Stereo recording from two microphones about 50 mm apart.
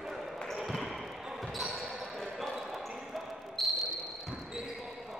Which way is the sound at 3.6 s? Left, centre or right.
Centre.